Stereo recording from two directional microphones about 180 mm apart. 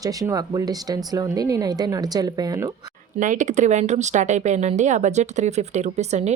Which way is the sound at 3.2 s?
45° right (ahead or behind).